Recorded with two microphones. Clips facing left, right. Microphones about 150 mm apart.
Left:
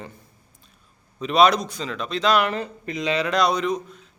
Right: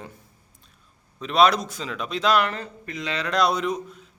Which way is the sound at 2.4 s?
15° left (ahead or behind).